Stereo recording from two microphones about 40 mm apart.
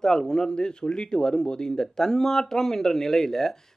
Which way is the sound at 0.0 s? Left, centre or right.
Centre.